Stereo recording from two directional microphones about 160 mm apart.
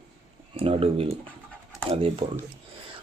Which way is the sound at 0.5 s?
35° right (ahead or behind).